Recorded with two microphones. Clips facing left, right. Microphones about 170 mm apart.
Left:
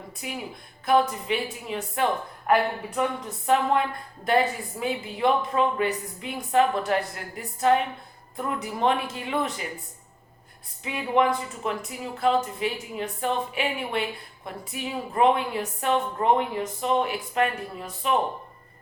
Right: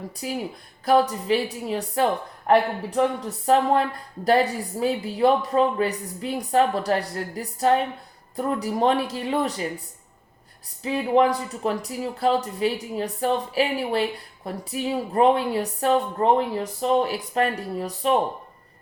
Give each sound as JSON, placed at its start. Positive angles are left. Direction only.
{"t": 0.2, "sound": "speech", "side_deg": -35}
{"t": 10.8, "sound": "speech", "side_deg": -35}